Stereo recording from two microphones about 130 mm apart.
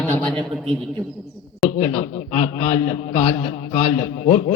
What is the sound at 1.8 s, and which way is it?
A man's voice, 70° left (ahead or behind).